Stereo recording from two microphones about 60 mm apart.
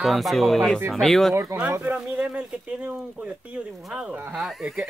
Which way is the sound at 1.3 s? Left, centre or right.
Right.